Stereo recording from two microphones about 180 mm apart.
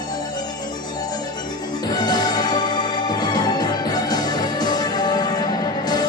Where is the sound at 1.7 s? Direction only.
25° left (ahead or behind).